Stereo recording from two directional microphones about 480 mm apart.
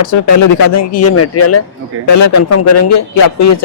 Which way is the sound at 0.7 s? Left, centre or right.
Left.